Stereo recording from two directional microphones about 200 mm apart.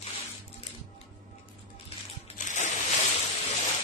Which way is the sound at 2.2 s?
35° left (ahead or behind).